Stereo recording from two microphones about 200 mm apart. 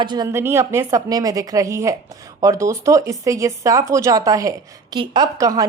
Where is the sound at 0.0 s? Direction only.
20° right (ahead or behind).